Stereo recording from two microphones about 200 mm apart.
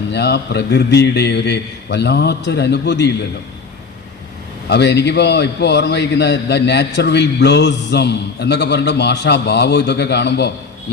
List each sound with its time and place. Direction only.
0.1 s a man's voice: 55° left (ahead or behind)
4.7 s a man's voice: 60° left (ahead or behind)